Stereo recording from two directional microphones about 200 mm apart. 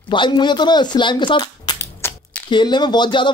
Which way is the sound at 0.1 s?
20° left (ahead or behind).